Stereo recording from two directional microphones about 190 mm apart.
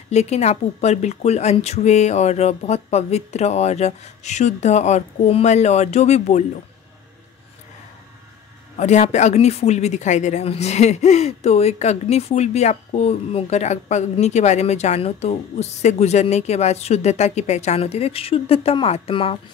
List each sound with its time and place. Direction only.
0.1 s a woman's voice: 35° left (ahead or behind)
8.7 s a woman's voice: 40° left (ahead or behind)